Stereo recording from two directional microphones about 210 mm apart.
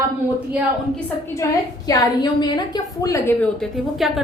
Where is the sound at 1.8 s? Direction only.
15° left (ahead or behind); by 4.2 s centre (ahead or behind).